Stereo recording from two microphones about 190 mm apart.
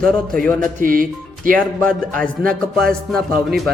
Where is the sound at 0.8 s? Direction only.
45° right (ahead or behind).